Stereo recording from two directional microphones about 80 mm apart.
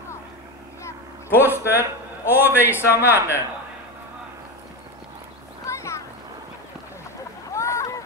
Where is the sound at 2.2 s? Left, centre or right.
Left.